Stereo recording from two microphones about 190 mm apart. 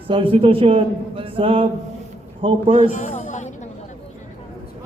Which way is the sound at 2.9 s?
40° left (ahead or behind).